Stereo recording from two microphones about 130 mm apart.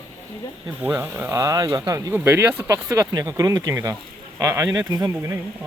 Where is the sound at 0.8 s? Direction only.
15° right (ahead or behind); by 1.8 s 30° right (ahead or behind).